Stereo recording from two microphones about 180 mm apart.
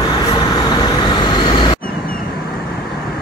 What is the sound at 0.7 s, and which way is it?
Vehicle, 25° left (ahead or behind).